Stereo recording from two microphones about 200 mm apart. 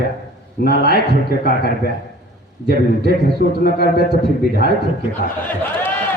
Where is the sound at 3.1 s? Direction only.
50° left (ahead or behind).